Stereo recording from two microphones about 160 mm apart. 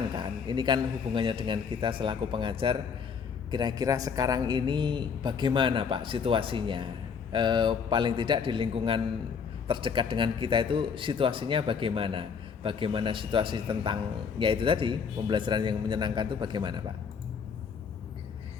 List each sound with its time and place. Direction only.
0.2 s a man's voice: 30° right (ahead or behind)